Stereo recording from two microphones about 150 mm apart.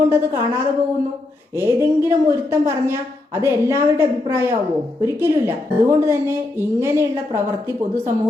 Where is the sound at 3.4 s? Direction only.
15° right (ahead or behind).